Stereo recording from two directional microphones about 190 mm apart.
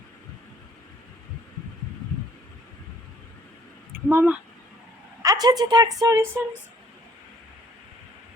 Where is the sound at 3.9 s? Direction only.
10° right (ahead or behind).